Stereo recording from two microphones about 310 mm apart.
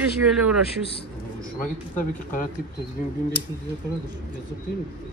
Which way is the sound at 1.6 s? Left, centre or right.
Left.